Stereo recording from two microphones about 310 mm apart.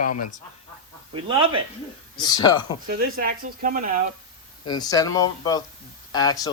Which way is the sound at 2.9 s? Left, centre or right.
Right.